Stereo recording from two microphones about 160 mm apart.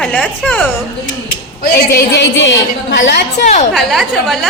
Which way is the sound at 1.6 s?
80° left.